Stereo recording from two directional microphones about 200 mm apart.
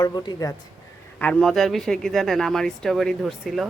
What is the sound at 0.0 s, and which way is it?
Speech, 20° left (ahead or behind).